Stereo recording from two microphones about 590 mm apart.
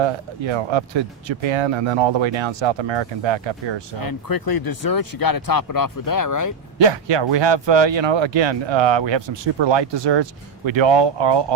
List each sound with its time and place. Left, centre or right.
0.0 s speech: right
4.0 s speech: left
6.7 s speech: right